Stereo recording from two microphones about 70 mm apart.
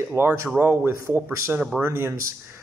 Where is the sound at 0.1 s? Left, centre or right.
Right.